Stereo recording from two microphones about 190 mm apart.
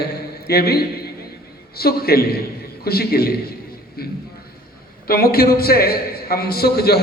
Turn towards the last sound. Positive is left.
turn(degrees=55)  # may be behind; listen again after turning